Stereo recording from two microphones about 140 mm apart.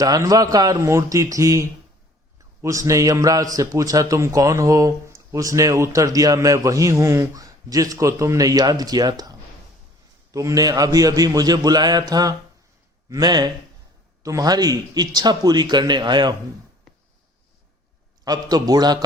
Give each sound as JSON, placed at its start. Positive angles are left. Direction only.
{"t": 0.0, "sound": "a man's voice", "side_deg": -25}
{"t": 18.3, "sound": "a man's voice", "side_deg": -30}